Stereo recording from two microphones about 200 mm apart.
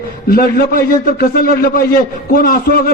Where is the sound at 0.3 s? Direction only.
50° left (ahead or behind).